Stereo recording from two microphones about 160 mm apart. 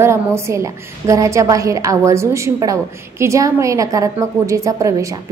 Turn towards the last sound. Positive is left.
turn(degrees=-20)  # may be behind; listen again after turning